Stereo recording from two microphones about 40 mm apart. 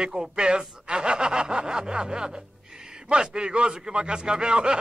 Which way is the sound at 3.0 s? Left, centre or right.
Right.